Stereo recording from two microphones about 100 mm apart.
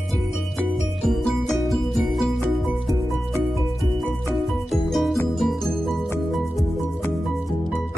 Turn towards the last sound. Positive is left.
turn(degrees=0)  # may be behind; listen again after turning